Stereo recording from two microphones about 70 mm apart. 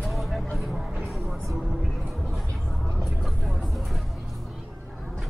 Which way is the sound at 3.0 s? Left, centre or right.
Centre.